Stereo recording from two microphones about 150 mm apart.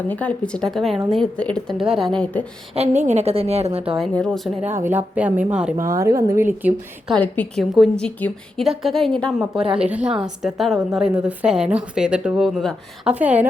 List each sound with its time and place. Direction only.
0.1 s speech: 10° left (ahead or behind)
2.7 s a woman's voice: 50° right (ahead or behind)
4.1 s speech: 5° left (ahead or behind)
4.6 s speech: 15° right (ahead or behind)
5.7 s speech: 20° right (ahead or behind)
7.2 s a woman's voice: 10° left (ahead or behind)
13.1 s speech: 10° right (ahead or behind)